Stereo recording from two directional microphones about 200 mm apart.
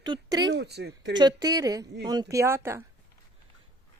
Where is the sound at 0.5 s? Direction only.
55° right (ahead or behind).